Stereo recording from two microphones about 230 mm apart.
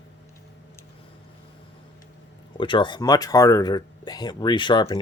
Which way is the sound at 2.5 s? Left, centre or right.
Left.